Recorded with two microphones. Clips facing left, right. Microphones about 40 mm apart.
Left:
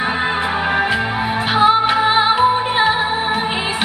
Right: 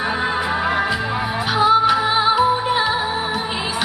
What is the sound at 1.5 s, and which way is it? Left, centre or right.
Music, left.